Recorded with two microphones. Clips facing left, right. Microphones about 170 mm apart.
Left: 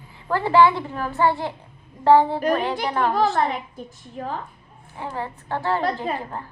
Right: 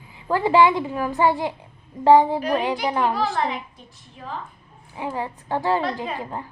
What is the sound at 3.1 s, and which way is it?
A woman's voice, 45° left (ahead or behind).